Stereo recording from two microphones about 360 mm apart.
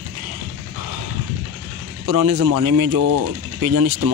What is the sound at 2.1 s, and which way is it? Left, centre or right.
Speech, right.